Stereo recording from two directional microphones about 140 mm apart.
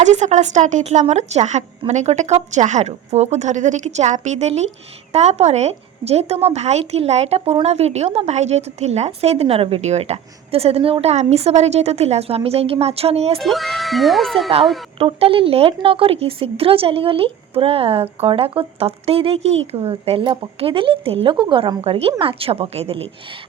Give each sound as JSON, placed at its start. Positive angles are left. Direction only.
{"t": 0.0, "sound": "a woman's voice", "side_deg": -55}
{"t": 13.4, "sound": "speech", "side_deg": 0}
{"t": 14.9, "sound": "speech", "side_deg": -45}